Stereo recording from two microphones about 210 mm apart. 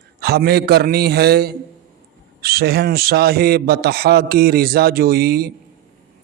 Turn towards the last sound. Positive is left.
turn(degrees=-50)  # may be behind; listen again after turning